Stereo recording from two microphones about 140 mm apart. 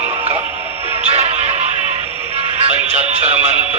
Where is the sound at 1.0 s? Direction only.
50° right (ahead or behind).